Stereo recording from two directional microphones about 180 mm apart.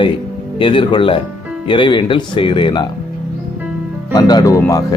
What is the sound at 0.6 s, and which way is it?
Speech, 30° left (ahead or behind).